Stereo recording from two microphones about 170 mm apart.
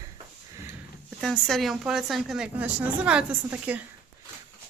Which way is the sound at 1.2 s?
Centre (ahead or behind).